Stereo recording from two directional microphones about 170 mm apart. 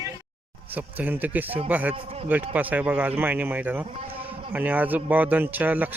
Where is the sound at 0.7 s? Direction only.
10° right (ahead or behind).